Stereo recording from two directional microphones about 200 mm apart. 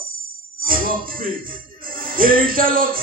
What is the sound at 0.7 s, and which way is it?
Speech, 45° right (ahead or behind).